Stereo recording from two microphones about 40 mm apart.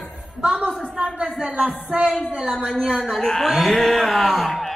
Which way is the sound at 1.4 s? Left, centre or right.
Right.